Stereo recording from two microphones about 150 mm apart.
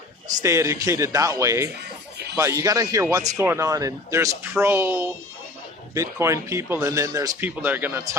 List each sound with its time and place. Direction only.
0.4 s speech: 20° right (ahead or behind)